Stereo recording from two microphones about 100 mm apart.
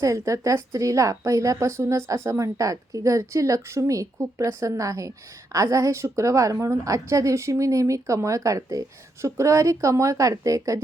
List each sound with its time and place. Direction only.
0.0 s a woman's voice: 30° right (ahead or behind)